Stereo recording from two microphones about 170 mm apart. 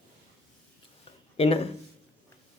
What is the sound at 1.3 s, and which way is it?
Speech, 35° left (ahead or behind).